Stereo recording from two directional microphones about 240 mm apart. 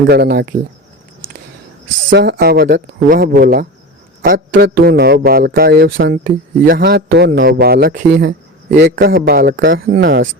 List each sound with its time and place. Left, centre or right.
0.1 s a man's voice: right
2.0 s a man's voice: right